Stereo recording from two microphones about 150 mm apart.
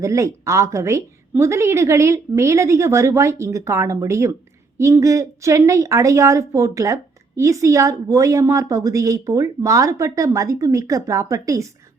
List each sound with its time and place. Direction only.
0.0 s a woman's voice: 20° right (ahead or behind)